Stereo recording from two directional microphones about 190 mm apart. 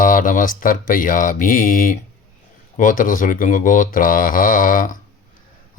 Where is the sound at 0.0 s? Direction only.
45° left (ahead or behind).